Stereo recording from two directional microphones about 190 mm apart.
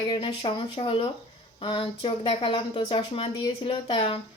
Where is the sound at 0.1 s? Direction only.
25° left (ahead or behind).